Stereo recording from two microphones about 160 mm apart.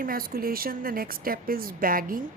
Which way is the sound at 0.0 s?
65° right (ahead or behind).